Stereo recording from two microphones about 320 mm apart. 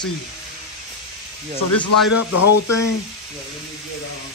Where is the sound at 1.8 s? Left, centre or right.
Left.